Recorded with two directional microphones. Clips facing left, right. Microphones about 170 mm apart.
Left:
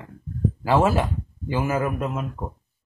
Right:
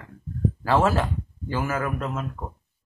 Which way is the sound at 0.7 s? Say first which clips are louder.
Left 2 dB; 10° left (ahead or behind).